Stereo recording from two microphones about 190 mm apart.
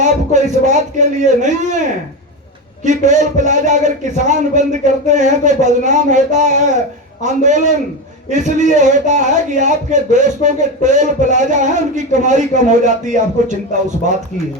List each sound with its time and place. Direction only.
0.0 s a man's voice: 40° right (ahead or behind)
2.8 s a man's voice: 40° right (ahead or behind)